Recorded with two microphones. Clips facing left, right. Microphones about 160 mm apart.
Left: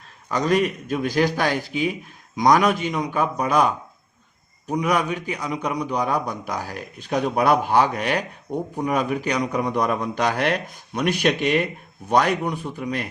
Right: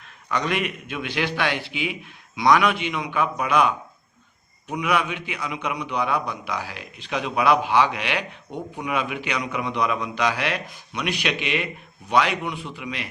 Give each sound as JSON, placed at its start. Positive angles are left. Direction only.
{"t": 0.3, "sound": "a man's voice", "side_deg": 40}